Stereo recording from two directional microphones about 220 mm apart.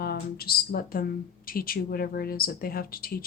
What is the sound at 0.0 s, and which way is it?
Speech, 45° left (ahead or behind).